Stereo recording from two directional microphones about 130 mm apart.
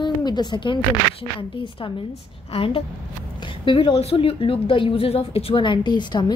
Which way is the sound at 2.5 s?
45° left (ahead or behind).